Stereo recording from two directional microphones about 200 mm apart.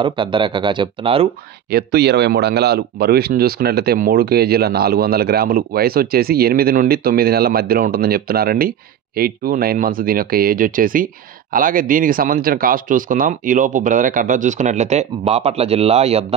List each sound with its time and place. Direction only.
0.0 s speech: 25° right (ahead or behind)
1.7 s speech: 50° right (ahead or behind); by 16.3 s 30° right (ahead or behind)